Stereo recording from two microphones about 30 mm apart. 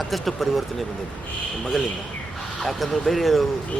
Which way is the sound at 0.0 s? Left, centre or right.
Centre.